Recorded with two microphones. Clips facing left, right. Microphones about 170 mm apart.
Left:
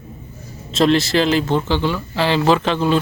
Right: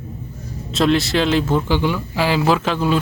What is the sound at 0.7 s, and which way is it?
Speech, centre (ahead or behind).